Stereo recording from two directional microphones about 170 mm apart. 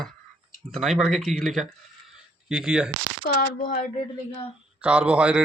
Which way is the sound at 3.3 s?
55° left (ahead or behind).